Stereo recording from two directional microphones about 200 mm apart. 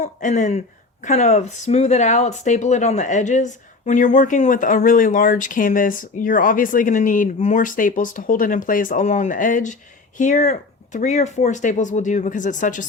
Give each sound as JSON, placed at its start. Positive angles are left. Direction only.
{"t": 0.0, "sound": "speech", "side_deg": 40}